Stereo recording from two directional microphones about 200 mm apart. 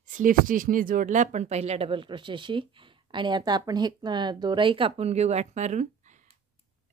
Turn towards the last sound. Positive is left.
turn(degrees=-35)  # may be behind; listen again after turning